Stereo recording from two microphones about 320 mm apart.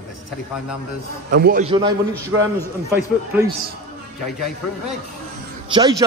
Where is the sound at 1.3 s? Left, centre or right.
Right; by 2.5 s centre.